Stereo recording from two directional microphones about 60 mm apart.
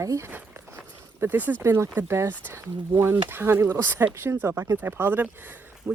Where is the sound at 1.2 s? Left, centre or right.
Right.